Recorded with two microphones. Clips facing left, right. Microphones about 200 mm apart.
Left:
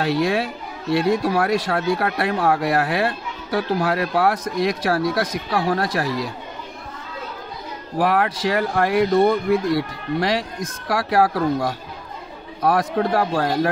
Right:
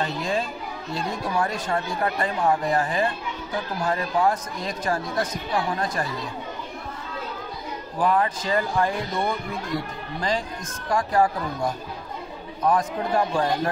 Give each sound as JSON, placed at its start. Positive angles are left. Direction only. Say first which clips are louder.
{"t": 0.0, "sound": "speech", "louder": "left 6 dB", "side_deg": 75}
{"t": 8.0, "sound": "speech", "louder": "left 3 dB", "side_deg": 70}